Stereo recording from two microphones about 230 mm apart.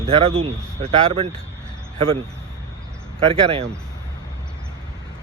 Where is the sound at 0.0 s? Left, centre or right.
Right.